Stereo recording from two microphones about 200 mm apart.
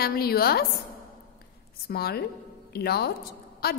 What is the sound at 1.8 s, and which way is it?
A woman's voice, 50° left (ahead or behind).